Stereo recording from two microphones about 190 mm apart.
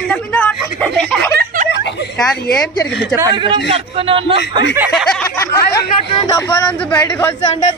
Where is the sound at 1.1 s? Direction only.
55° right (ahead or behind).